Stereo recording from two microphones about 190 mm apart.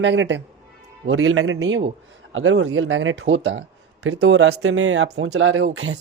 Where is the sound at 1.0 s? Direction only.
90° right.